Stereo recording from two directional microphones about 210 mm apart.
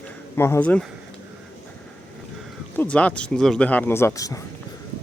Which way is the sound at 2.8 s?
5° left (ahead or behind).